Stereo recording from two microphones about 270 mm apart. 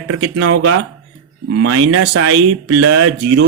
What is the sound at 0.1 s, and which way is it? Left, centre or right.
Speech, right.